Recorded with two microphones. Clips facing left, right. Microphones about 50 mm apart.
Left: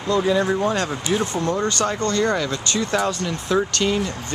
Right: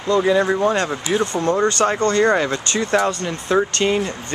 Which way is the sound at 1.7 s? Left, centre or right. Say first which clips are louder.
Right 4 dB; right.